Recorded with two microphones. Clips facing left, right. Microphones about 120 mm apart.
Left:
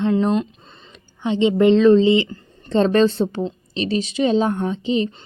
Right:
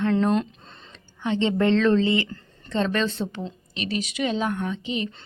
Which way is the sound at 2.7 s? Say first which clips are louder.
Left 9 dB; 35° left (ahead or behind).